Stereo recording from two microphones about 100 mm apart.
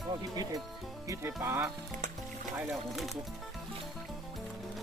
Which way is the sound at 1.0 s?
25° right (ahead or behind).